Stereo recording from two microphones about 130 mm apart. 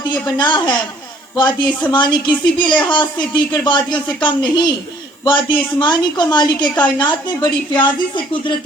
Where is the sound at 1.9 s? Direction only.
35° left (ahead or behind).